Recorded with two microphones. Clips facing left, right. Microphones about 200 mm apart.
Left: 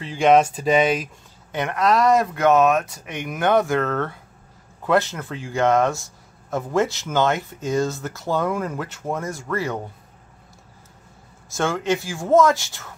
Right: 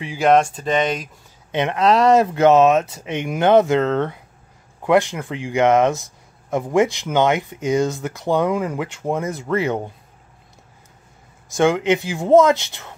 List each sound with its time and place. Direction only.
0.0 s speech: 10° right (ahead or behind)
0.3 s speech: 5° left (ahead or behind)
1.5 s speech: 25° right (ahead or behind)
11.5 s speech: 15° right (ahead or behind)